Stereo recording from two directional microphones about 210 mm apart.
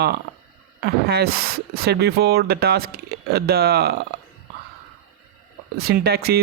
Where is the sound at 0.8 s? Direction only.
50° right (ahead or behind).